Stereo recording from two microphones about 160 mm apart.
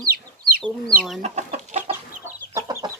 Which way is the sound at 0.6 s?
Centre (ahead or behind).